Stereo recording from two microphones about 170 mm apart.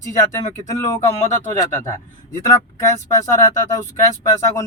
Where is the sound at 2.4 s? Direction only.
20° left (ahead or behind).